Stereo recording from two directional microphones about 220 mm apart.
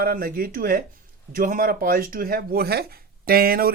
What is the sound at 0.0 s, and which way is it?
Speech, 40° right (ahead or behind).